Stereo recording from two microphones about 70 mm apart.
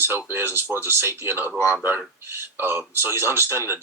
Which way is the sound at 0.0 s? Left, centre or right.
Right.